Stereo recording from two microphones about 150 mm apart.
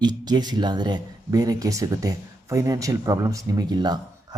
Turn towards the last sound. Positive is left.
turn(degrees=-25)  # may be behind; listen again after turning